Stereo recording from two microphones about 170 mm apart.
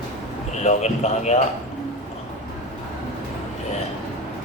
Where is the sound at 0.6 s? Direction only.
40° left (ahead or behind).